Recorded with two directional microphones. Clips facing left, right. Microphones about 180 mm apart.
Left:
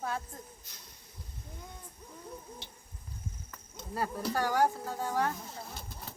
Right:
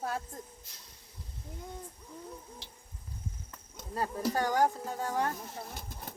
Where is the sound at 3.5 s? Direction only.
15° right (ahead or behind).